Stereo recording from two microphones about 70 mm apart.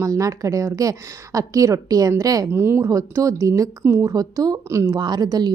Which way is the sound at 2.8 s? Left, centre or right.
Right.